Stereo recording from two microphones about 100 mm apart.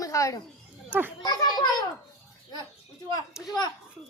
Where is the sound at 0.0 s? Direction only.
35° left (ahead or behind).